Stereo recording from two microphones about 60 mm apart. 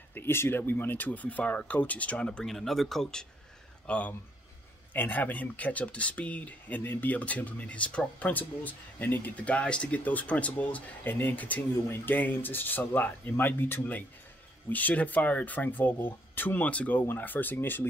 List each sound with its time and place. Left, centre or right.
0.1 s speech: left; by 2.4 s centre
2.4 s speech: centre
3.8 s speech: left